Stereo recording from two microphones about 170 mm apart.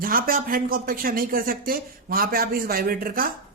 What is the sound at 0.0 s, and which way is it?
A woman's voice, 55° right (ahead or behind).